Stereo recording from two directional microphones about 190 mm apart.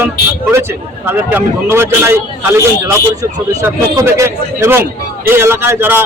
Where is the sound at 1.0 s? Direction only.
10° right (ahead or behind).